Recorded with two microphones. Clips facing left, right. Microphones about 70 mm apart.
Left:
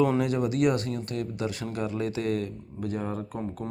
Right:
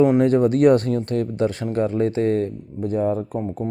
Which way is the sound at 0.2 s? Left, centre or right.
Right.